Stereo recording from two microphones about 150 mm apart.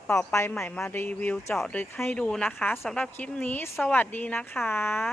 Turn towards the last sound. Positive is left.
turn(degrees=15)  # may be behind; listen again after turning